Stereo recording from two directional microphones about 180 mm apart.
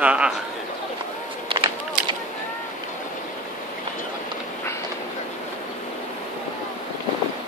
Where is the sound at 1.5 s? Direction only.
30° right (ahead or behind).